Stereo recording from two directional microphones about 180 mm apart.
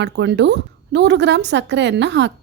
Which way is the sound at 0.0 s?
75° right (ahead or behind).